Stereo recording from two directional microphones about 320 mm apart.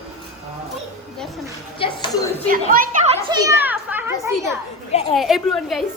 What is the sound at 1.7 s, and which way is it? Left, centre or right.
Speech, centre.